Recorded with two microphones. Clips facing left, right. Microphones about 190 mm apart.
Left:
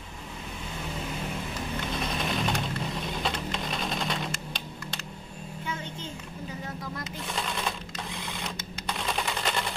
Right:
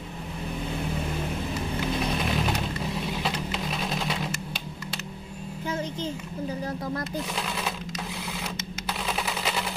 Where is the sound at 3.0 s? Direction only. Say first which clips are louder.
Right 2 dB; 5° right (ahead or behind).